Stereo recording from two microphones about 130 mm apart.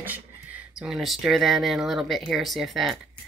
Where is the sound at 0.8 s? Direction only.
5° right (ahead or behind).